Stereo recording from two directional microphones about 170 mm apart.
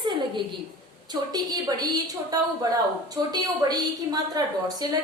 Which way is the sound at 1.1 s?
25° right (ahead or behind).